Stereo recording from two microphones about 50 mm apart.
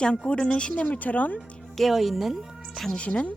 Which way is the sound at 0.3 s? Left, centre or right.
Centre.